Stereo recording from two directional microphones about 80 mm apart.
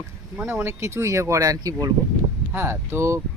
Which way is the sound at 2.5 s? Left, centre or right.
Right.